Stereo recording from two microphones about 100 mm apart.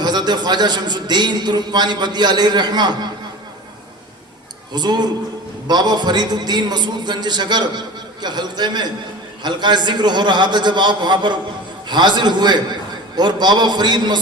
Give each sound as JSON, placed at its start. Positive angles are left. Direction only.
{"t": 0.0, "sound": "a man's voice", "side_deg": -45}
{"t": 4.7, "sound": "a man's voice", "side_deg": -45}